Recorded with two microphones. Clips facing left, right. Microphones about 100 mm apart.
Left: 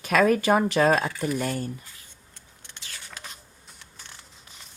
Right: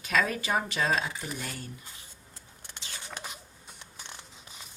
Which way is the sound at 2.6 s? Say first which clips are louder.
Right 1 dB; 20° right (ahead or behind).